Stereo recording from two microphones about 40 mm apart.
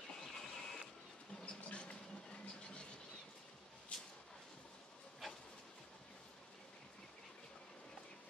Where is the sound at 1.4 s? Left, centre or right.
Left.